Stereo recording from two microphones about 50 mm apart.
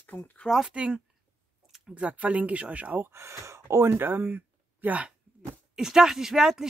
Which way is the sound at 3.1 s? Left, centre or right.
Right.